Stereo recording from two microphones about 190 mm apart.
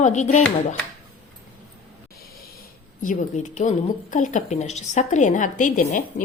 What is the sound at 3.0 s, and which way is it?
A woman's voice, 40° left (ahead or behind).